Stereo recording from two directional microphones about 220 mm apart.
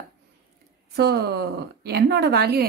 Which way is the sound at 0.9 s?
50° right (ahead or behind).